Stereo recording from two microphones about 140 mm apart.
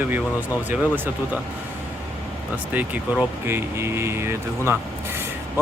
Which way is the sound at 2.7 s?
10° right (ahead or behind).